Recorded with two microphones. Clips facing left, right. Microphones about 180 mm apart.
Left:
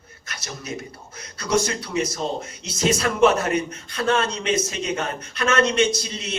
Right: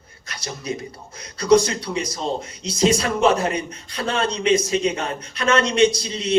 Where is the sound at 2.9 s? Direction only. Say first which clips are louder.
Even; 30° right (ahead or behind).